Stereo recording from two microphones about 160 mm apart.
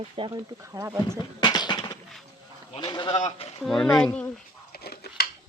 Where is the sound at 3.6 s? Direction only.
Centre (ahead or behind).